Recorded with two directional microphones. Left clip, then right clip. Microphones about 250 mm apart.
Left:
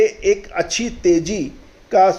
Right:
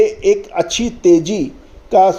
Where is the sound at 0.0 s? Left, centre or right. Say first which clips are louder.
Right 3 dB; right.